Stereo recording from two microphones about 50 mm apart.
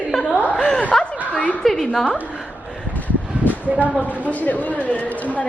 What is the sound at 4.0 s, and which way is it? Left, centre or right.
Speech, right.